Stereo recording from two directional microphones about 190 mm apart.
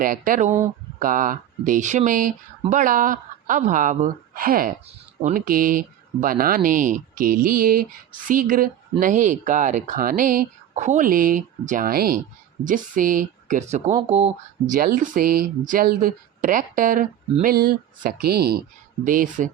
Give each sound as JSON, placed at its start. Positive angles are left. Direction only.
{"t": 0.0, "sound": "speech", "side_deg": -45}
{"t": 14.8, "sound": "speech", "side_deg": -45}
{"t": 19.0, "sound": "speech", "side_deg": -45}